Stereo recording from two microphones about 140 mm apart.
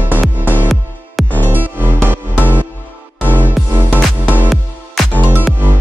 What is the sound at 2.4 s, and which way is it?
Music, 15° left (ahead or behind).